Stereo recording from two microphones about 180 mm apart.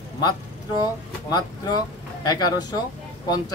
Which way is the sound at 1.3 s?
25° left (ahead or behind).